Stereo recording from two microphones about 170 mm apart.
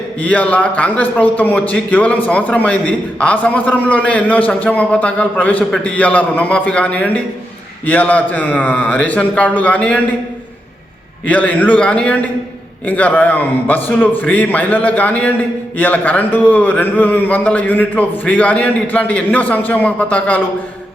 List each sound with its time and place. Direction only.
0.2 s a man's voice: 10° left (ahead or behind)
11.3 s a man's voice: 10° left (ahead or behind)